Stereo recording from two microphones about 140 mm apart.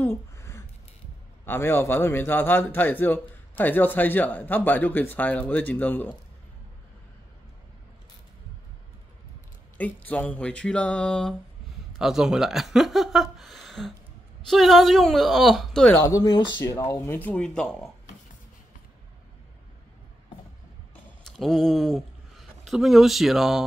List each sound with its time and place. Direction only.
0.0 s a sound: 20° left (ahead or behind)
1.4 s a man's voice: 15° left (ahead or behind)
9.8 s a man's voice: 10° left (ahead or behind)
16.0 s speech: 25° left (ahead or behind)
16.9 s a man's voice: 20° left (ahead or behind)
20.9 s a sound: 5° left (ahead or behind)